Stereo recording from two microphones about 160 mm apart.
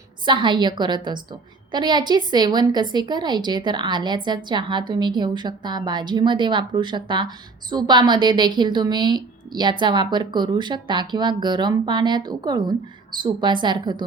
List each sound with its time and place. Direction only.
0.3 s a woman's voice: 30° right (ahead or behind)